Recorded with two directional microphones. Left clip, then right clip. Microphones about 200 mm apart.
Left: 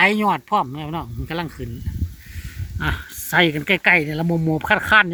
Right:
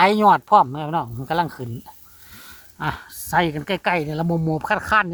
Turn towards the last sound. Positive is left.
turn(degrees=0)  # may be behind; listen again after turning